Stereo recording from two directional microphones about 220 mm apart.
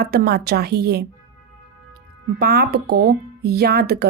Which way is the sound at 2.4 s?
45° right (ahead or behind).